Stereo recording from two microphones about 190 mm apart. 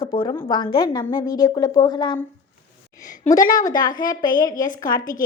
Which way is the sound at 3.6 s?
20° left (ahead or behind).